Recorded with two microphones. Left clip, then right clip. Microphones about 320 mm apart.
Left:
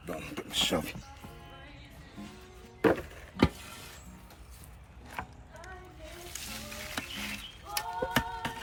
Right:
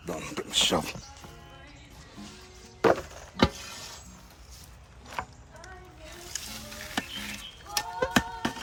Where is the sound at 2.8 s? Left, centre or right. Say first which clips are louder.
Right 4 dB; centre.